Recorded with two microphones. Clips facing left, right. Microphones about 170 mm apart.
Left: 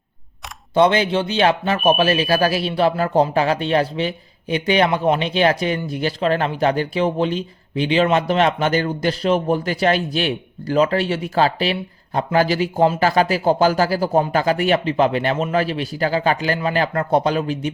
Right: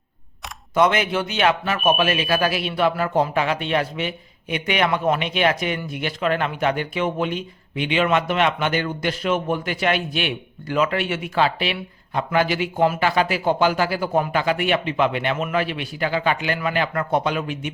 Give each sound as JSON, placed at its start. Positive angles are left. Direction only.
{"t": 0.7, "sound": "speech", "side_deg": 30}